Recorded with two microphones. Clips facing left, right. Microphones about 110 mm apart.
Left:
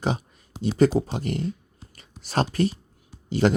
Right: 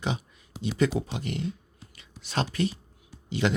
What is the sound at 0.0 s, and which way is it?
Speech, 40° left (ahead or behind).